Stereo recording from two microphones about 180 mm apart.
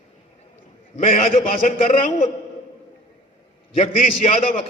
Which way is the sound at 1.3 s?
50° left (ahead or behind).